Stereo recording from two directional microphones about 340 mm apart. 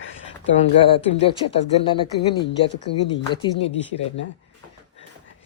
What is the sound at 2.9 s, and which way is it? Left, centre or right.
Speech, left.